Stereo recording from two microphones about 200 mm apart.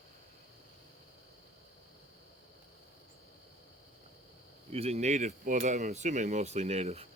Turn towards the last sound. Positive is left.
turn(degrees=-30)  # may be behind; listen again after turning